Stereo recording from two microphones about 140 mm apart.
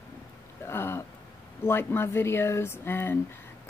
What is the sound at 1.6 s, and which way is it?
Speech, 15° left (ahead or behind).